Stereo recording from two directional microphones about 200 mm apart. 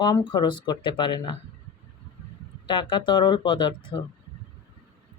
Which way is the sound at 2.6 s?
25° left (ahead or behind).